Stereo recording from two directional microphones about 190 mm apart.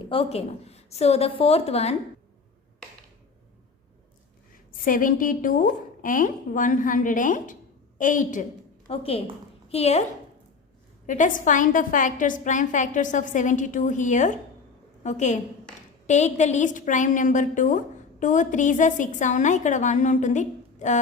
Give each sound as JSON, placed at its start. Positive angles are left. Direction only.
{"t": 0.0, "sound": "a woman's voice", "side_deg": 30}
{"t": 4.9, "sound": "speech", "side_deg": 45}
{"t": 8.9, "sound": "a woman's voice", "side_deg": 30}